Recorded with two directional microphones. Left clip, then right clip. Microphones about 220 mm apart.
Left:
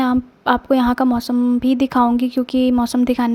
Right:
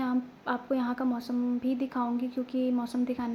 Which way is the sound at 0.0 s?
45° left (ahead or behind).